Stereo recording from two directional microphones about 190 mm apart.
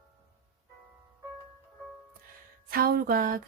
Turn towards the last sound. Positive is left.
turn(degrees=-50)  # may be behind; listen again after turning